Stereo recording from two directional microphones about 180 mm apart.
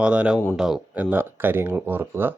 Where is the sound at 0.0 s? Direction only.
5° right (ahead or behind).